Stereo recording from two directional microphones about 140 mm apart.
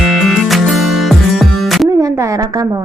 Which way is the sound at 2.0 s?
25° right (ahead or behind).